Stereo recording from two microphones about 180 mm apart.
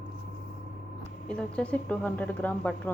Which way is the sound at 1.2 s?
5° left (ahead or behind).